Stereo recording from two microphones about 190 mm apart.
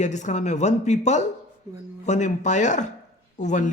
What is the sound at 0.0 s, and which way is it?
Speech, 40° left (ahead or behind).